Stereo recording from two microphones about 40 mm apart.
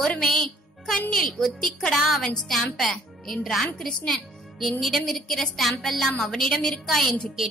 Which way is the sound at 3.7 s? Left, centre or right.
Centre.